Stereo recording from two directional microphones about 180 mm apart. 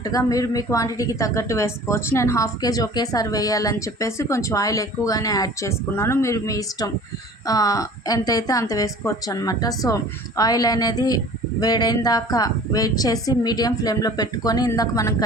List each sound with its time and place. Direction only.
0.0 s a woman's voice: 20° left (ahead or behind)